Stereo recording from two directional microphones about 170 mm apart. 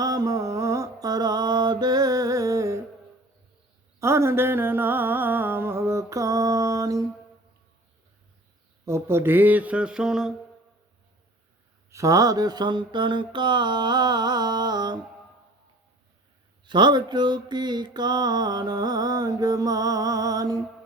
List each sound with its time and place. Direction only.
0.0 s mantra: 20° right (ahead or behind)
4.0 s mantra: 15° right (ahead or behind)
8.8 s mantra: 15° right (ahead or behind)
11.9 s mantra: 20° right (ahead or behind)
16.6 s mantra: 25° right (ahead or behind)